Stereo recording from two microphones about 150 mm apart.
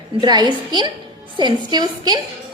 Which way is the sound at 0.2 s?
30° right (ahead or behind).